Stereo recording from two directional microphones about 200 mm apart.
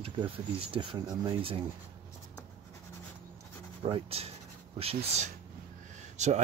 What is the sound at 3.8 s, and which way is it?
Speech, 25° right (ahead or behind).